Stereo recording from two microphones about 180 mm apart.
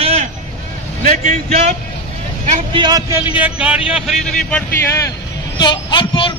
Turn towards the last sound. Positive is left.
turn(degrees=30)  # may be behind; listen again after turning